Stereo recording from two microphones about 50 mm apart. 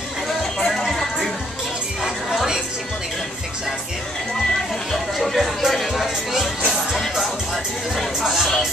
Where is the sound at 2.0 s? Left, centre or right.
Centre.